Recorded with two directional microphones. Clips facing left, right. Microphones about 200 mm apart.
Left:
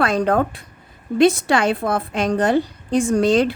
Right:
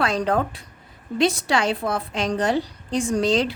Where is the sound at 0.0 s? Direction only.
55° left (ahead or behind).